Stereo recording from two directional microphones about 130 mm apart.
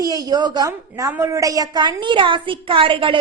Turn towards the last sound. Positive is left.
turn(degrees=-40)  # may be behind; listen again after turning